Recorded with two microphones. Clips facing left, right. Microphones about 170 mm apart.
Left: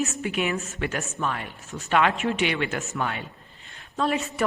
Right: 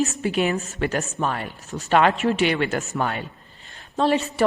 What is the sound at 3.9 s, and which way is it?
Speech, 30° right (ahead or behind).